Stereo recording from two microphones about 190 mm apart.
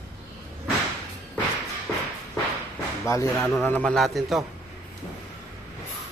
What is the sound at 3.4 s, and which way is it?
A man's voice, 5° left (ahead or behind).